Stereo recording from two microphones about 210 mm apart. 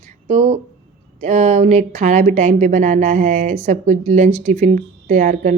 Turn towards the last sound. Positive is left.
turn(degrees=-35)  # may be behind; listen again after turning